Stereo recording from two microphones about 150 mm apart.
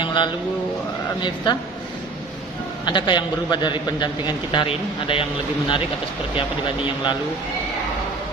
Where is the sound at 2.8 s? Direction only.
30° left (ahead or behind).